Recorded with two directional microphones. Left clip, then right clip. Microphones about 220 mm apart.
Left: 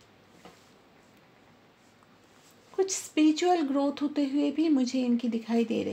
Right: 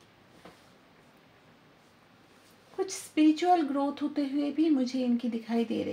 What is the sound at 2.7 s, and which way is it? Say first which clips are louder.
Speech: left 2 dB; 40° left (ahead or behind).